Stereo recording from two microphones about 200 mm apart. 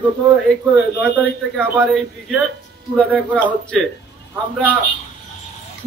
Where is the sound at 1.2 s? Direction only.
5° left (ahead or behind).